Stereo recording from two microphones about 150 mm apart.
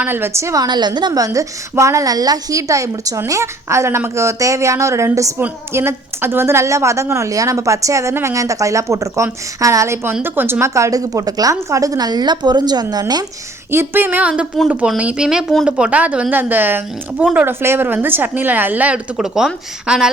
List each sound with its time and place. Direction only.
0.0 s a woman's voice: 15° right (ahead or behind)
13.7 s speech: 15° right (ahead or behind)